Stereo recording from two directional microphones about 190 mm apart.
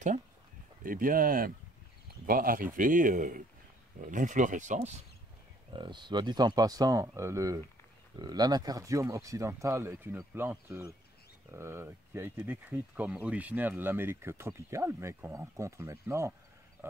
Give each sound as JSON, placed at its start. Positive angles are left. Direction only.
{"t": 0.8, "sound": "a man's voice", "side_deg": -45}
{"t": 5.7, "sound": "speech", "side_deg": -25}